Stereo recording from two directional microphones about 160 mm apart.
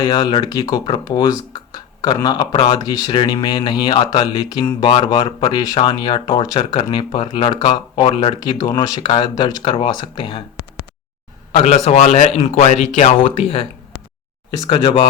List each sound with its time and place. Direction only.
0.0 s speech: 25° left (ahead or behind)
11.5 s speech: 45° left (ahead or behind)
13.2 s speech: 35° left (ahead or behind)
14.7 s speech: 35° left (ahead or behind)